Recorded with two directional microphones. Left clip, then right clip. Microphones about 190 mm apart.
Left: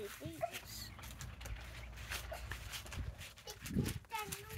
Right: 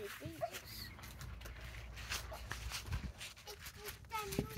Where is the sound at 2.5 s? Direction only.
40° right (ahead or behind).